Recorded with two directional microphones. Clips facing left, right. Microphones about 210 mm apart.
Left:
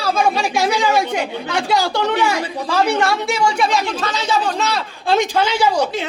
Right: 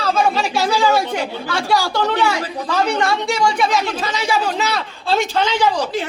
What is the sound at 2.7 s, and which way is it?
A woman's voice, 5° left (ahead or behind).